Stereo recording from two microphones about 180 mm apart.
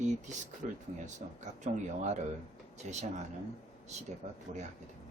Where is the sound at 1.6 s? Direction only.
45° right (ahead or behind).